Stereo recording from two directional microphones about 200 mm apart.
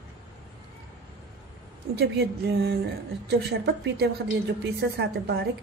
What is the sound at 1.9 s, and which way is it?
A woman's voice, 55° right (ahead or behind).